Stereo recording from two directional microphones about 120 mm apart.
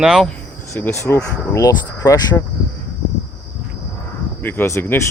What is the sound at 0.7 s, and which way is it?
Speech, 20° left (ahead or behind).